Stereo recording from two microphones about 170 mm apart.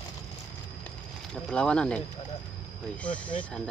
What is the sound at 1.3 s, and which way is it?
Speech, 5° left (ahead or behind).